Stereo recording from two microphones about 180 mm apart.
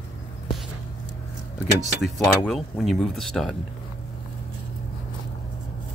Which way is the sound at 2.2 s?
5° left (ahead or behind).